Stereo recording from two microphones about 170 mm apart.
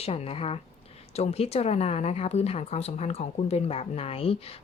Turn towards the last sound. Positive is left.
turn(degrees=35)  # may be behind; listen again after turning